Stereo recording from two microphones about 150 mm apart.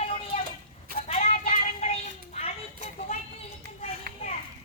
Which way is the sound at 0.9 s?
45° left (ahead or behind).